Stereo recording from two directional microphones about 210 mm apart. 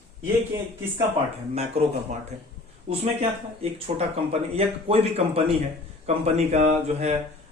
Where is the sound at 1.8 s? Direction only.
30° right (ahead or behind).